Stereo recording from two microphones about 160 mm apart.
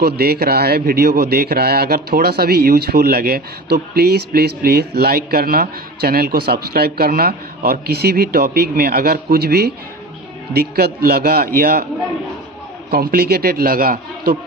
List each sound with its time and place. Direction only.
0.0 s a man's voice: 75° right (ahead or behind)
12.9 s a man's voice: 70° right (ahead or behind)